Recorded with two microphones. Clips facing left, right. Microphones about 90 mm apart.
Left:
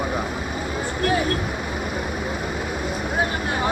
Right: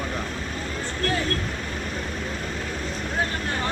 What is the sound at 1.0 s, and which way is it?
Speech, 15° left (ahead or behind).